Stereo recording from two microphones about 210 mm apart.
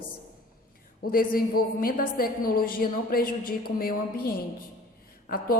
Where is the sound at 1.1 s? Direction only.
45° left (ahead or behind).